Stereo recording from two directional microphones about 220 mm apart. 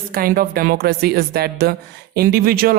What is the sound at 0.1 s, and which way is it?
Speech, 40° right (ahead or behind).